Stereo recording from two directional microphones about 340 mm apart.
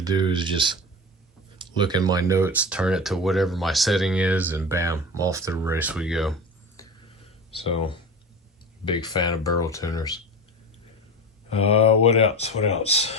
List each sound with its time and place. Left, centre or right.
0.0 s speech: centre
7.5 s speech: centre
11.5 s speech: centre